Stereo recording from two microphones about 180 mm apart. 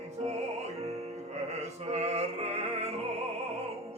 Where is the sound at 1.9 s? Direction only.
35° right (ahead or behind).